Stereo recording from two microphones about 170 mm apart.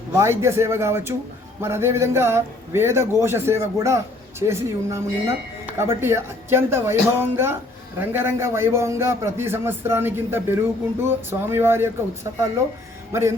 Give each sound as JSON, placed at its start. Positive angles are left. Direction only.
{"t": 0.1, "sound": "a man's voice", "side_deg": -15}